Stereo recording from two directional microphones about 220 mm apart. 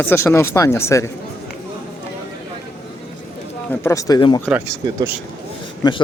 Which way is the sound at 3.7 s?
15° left (ahead or behind).